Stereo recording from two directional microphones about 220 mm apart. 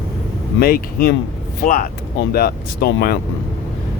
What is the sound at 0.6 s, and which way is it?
Speech, 40° left (ahead or behind).